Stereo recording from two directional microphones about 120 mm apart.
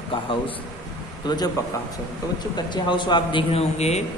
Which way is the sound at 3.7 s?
65° left (ahead or behind).